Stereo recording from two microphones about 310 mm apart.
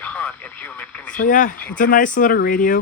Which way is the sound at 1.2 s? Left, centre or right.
Left.